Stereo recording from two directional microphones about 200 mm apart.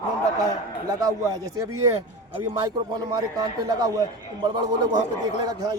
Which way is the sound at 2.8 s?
20° right (ahead or behind).